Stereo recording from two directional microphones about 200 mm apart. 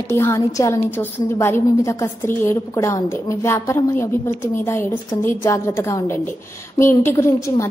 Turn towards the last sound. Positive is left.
turn(degrees=15)  # may be behind; listen again after turning